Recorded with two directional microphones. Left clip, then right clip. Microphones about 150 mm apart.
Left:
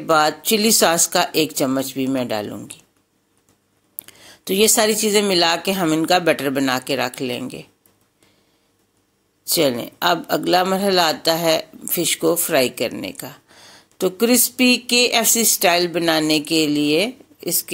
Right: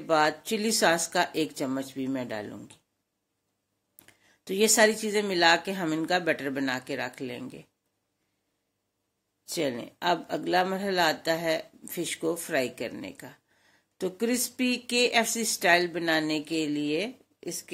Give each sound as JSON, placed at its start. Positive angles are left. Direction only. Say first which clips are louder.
{"t": 0.0, "sound": "speech", "louder": "left 8 dB", "side_deg": 25}
{"t": 4.0, "sound": "speech", "louder": "left 15 dB", "side_deg": 20}
{"t": 9.5, "sound": "speech", "louder": "left 12 dB", "side_deg": 20}